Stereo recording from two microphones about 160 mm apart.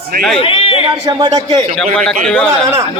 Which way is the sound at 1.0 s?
25° right (ahead or behind).